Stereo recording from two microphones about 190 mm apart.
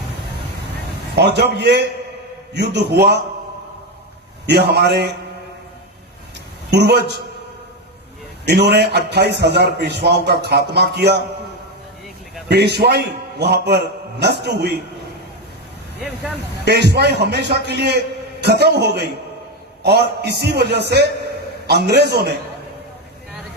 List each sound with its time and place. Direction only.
1.1 s a man's voice: 60° right (ahead or behind)
4.4 s a man's voice: 60° right (ahead or behind)
6.7 s a man's voice: 60° right (ahead or behind)
8.4 s a man's voice: 60° right (ahead or behind)
12.5 s a man's voice: 60° right (ahead or behind)
16.6 s a man's voice: 60° right (ahead or behind)